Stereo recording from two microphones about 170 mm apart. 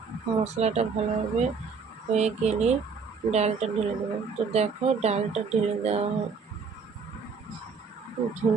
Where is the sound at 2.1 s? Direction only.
40° right (ahead or behind).